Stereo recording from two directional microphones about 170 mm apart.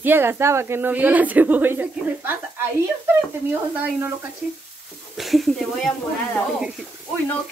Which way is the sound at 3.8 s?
10° right (ahead or behind).